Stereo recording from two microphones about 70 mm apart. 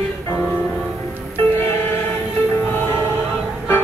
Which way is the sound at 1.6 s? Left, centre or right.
Left.